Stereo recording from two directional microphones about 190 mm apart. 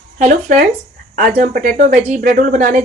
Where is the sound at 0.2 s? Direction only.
40° right (ahead or behind).